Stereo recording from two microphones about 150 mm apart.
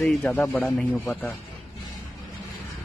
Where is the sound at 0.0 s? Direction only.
10° left (ahead or behind).